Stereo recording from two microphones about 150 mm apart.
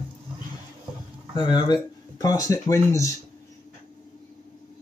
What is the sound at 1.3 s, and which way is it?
Speech, 30° left (ahead or behind).